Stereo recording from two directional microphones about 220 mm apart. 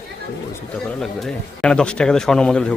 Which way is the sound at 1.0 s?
Centre (ahead or behind).